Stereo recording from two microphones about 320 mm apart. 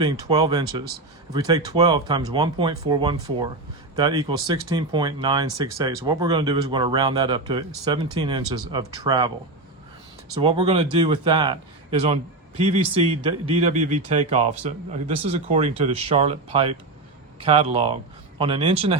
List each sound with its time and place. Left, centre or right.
0.0 s speech: centre
10.4 s speech: centre